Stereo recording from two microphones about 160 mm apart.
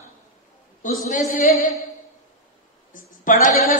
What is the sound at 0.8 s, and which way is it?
Speech, 55° left (ahead or behind).